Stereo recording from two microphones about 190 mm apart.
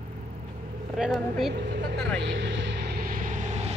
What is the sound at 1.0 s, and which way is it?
Speech, centre (ahead or behind).